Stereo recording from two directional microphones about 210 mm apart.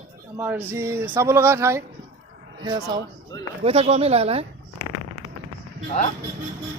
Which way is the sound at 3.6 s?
30° right (ahead or behind).